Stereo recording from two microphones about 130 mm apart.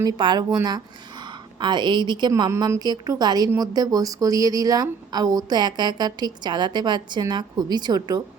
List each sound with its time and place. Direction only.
0.0 s a woman's voice: 35° right (ahead or behind)